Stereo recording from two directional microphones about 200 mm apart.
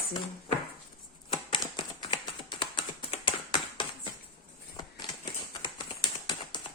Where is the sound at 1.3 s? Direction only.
25° left (ahead or behind).